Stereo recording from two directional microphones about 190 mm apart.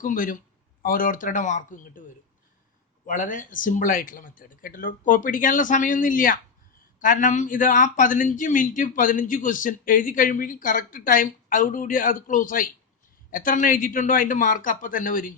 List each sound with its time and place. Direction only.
0.0 s speech: 45° left (ahead or behind)
3.1 s a man's voice: 45° left (ahead or behind)